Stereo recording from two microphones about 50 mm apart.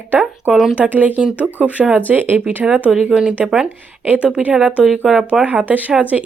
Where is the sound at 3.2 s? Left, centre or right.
Right.